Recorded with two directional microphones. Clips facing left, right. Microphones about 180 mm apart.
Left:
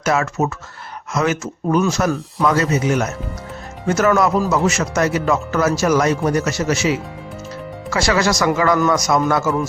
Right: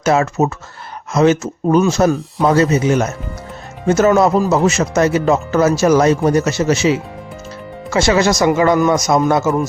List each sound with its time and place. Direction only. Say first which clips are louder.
0.0 s speech: right 4 dB; 25° right (ahead or behind)